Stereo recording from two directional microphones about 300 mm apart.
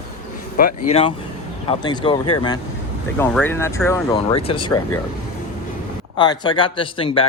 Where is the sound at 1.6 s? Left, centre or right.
Centre.